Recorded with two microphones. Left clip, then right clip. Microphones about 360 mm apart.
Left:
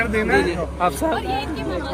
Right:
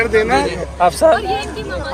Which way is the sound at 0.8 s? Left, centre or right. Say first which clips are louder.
Right 10 dB; right.